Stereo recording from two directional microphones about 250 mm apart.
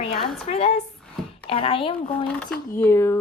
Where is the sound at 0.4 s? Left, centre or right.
Left.